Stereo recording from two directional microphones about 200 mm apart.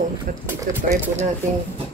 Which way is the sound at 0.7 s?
10° right (ahead or behind).